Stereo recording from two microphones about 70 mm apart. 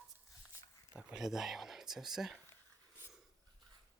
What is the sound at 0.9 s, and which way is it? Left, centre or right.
Speech, centre.